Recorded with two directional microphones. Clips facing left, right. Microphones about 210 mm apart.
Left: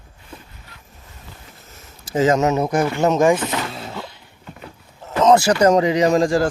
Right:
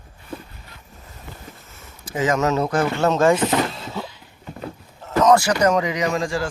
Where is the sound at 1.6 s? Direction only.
35° left (ahead or behind); by 3.3 s 15° left (ahead or behind).